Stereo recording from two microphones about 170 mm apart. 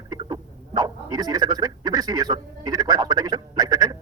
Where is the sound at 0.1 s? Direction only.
25° right (ahead or behind).